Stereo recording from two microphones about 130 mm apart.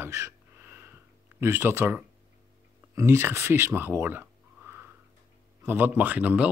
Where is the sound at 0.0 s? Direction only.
20° right (ahead or behind).